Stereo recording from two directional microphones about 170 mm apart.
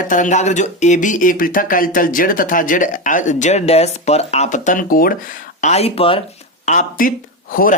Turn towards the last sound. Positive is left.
turn(degrees=55)  # may be behind; listen again after turning